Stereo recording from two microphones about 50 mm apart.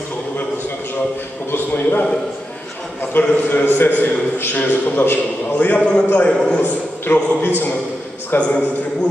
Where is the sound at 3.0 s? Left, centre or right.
Left.